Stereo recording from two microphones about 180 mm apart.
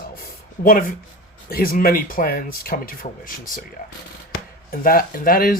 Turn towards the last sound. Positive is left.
turn(degrees=55)  # may be behind; listen again after turning